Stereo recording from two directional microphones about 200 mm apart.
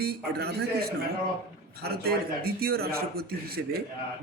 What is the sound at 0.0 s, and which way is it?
A man's voice, 50° right (ahead or behind).